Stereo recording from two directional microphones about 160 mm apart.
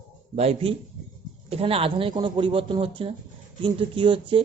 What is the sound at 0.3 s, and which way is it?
Speech, 40° right (ahead or behind).